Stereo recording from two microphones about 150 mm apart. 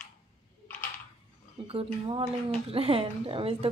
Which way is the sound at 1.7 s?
40° right (ahead or behind).